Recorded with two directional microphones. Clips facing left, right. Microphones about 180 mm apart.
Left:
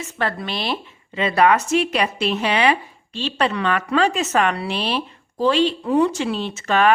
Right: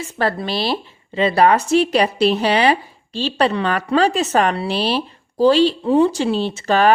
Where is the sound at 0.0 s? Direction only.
35° right (ahead or behind).